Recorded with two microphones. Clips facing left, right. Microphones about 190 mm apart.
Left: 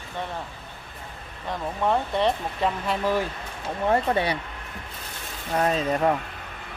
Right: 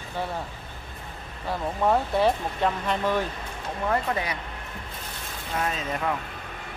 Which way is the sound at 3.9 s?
30° left (ahead or behind).